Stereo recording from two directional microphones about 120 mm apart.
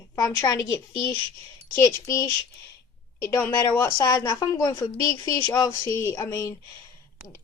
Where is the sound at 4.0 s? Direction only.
35° left (ahead or behind).